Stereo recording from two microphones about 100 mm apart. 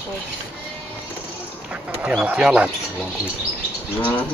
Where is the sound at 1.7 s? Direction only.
15° right (ahead or behind).